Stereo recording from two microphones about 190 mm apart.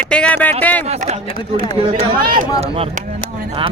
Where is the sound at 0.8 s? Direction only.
35° right (ahead or behind).